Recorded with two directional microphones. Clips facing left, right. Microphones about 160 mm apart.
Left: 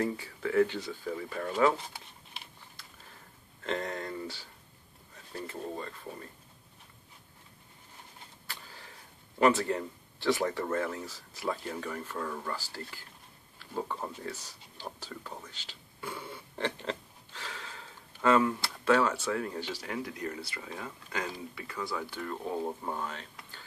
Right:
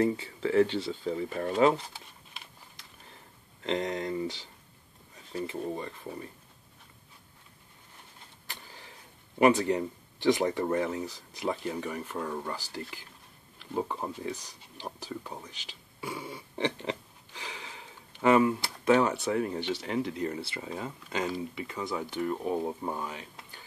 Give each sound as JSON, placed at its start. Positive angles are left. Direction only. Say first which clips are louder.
{"t": 0.0, "sound": "speech", "louder": "right 5 dB", "side_deg": -25}
{"t": 3.6, "sound": "speech", "louder": "right 4 dB", "side_deg": -20}
{"t": 8.5, "sound": "a sound", "louder": "right 1 dB", "side_deg": -20}
{"t": 9.4, "sound": "speech", "louder": "right 3 dB", "side_deg": -15}